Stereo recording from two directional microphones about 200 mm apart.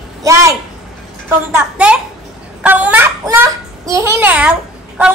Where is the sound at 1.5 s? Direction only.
5° right (ahead or behind).